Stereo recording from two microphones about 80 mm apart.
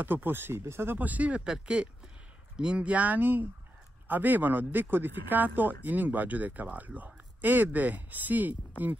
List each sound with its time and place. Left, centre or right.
0.0 s speech: right